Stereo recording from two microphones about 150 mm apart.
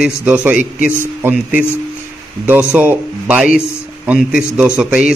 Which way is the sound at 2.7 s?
10° right (ahead or behind).